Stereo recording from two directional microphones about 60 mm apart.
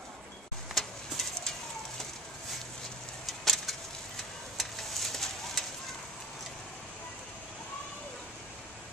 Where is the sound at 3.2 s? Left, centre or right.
Centre.